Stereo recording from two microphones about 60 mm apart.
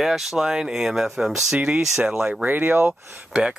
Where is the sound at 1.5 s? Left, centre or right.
Right.